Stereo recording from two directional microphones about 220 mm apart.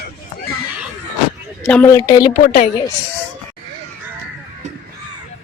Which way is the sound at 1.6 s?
5° left (ahead or behind).